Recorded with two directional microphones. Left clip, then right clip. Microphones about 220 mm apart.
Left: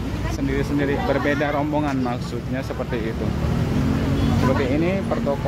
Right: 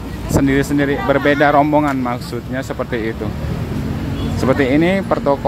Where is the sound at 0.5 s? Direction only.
25° right (ahead or behind).